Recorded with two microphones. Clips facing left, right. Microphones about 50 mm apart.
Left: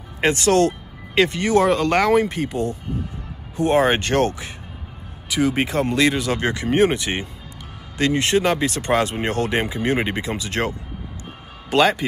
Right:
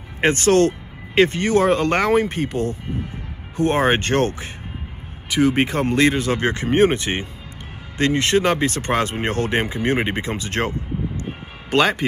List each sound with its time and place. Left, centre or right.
0.2 s speech: right